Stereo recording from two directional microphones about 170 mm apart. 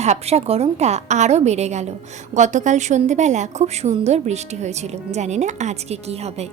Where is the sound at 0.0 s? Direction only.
40° right (ahead or behind).